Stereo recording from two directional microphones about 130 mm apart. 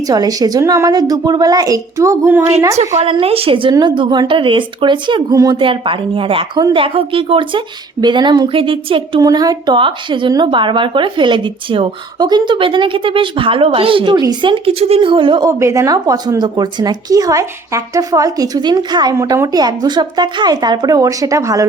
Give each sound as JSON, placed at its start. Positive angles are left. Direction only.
{"t": 0.1, "sound": "a woman's voice", "side_deg": -30}
{"t": 3.0, "sound": "a woman's voice", "side_deg": -45}
{"t": 5.3, "sound": "a woman's voice", "side_deg": -25}
{"t": 5.5, "sound": "a woman's voice", "side_deg": -40}
{"t": 9.2, "sound": "a woman's voice", "side_deg": -30}
{"t": 15.4, "sound": "a woman's voice", "side_deg": -25}
{"t": 19.1, "sound": "a woman's voice", "side_deg": -25}